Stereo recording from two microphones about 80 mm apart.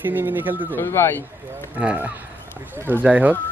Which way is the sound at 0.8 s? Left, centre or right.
Left.